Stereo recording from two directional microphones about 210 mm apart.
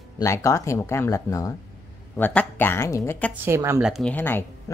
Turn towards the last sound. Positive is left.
turn(degrees=10)  # may be behind; listen again after turning